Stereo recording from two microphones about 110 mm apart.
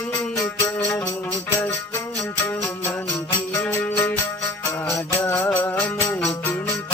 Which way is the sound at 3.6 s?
20° left (ahead or behind).